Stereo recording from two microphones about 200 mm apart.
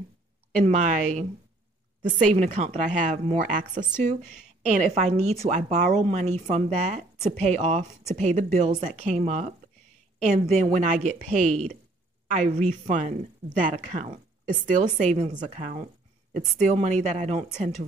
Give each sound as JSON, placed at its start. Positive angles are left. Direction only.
{"t": 0.6, "sound": "speech", "side_deg": -40}